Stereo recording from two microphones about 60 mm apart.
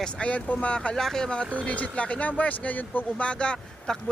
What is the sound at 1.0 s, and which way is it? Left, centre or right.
Speech, centre.